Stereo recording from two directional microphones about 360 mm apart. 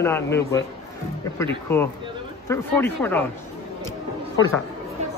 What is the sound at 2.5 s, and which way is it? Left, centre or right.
Speech, centre.